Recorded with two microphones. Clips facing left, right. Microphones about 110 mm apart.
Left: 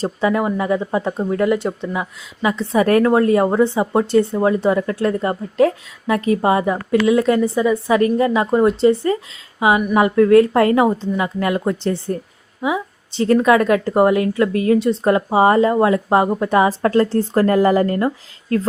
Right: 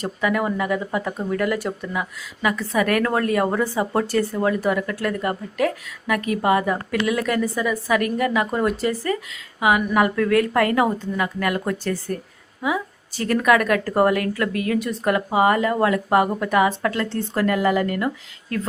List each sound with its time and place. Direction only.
0.0 s a woman's voice: 30° left (ahead or behind)